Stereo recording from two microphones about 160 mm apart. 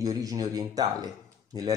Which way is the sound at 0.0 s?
20° right (ahead or behind).